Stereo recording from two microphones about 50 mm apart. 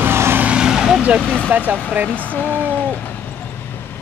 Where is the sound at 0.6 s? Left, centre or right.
Centre.